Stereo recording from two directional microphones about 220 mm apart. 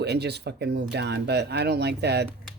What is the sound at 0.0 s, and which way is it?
Speech, 50° right (ahead or behind).